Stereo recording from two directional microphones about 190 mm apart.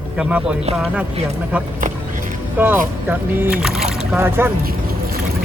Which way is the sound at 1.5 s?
10° right (ahead or behind).